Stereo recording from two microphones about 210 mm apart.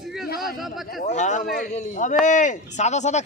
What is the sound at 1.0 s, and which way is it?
Speech, 35° left (ahead or behind).